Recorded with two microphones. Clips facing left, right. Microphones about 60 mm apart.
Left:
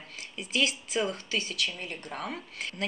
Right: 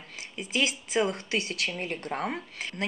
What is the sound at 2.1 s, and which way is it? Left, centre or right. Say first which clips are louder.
Speech: right 5 dB; right.